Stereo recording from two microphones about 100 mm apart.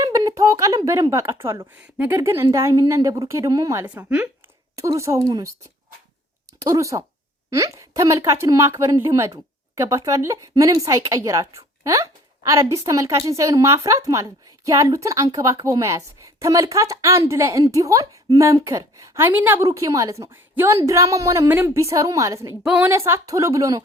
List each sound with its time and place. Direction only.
0.0 s a sound: 35° right (ahead or behind)
0.9 s a woman's voice: 30° right (ahead or behind)
3.8 s a woman's voice: 15° right (ahead or behind)
4.8 s a woman's voice: 30° right (ahead or behind)
6.6 s a woman's voice: 35° right (ahead or behind)
19.6 s a woman's voice: 35° right (ahead or behind)
21.5 s a woman's voice: 15° right (ahead or behind)
21.8 s a woman's voice: 30° right (ahead or behind)